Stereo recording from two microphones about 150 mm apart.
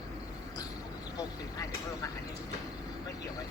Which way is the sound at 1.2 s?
20° left (ahead or behind).